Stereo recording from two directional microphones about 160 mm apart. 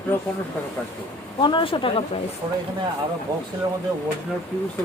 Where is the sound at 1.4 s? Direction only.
30° left (ahead or behind).